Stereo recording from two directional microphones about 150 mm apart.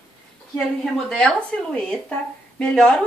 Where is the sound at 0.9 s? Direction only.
5° left (ahead or behind).